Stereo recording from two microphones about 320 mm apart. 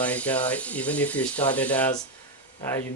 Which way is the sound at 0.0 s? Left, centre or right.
Centre.